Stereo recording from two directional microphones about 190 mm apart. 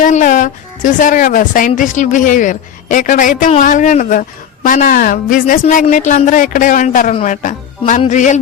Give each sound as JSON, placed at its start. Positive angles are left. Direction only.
{"t": 0.0, "sound": "a woman's voice", "side_deg": 40}